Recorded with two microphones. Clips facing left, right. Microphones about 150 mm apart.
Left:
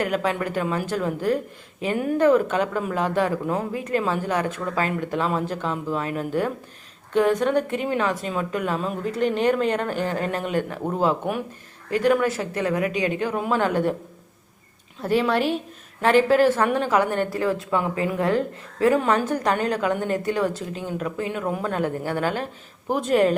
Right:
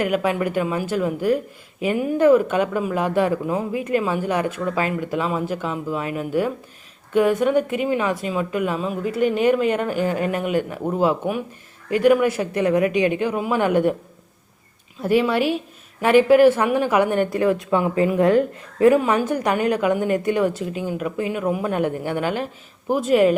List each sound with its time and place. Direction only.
0.0 s speech: 10° right (ahead or behind)
15.0 s speech: 10° right (ahead or behind)